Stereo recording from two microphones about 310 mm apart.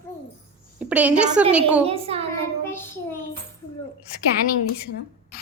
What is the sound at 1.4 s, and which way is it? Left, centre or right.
Speech, centre.